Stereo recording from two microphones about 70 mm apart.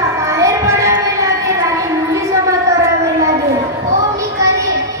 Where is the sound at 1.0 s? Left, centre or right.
Right.